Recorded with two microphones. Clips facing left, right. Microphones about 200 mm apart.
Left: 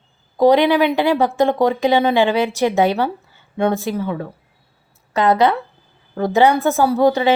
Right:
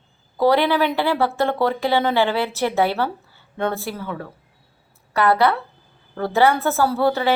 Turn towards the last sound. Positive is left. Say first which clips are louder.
# left 4 dB
turn(degrees=15)  # may be behind; listen again after turning